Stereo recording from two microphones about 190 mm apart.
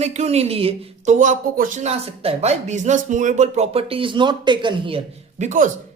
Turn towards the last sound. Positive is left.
turn(degrees=-40)  # may be behind; listen again after turning